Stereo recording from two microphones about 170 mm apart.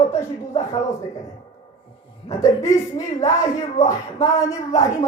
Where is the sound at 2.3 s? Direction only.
20° left (ahead or behind).